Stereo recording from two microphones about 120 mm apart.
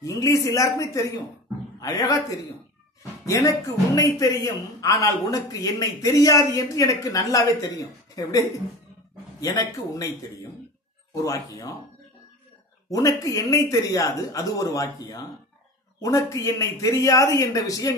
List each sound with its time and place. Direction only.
0.0 s a man's voice: 30° left (ahead or behind)
3.3 s a man's voice: 30° left (ahead or behind)
11.1 s a man's voice: 30° left (ahead or behind)
12.9 s a man's voice: 30° left (ahead or behind)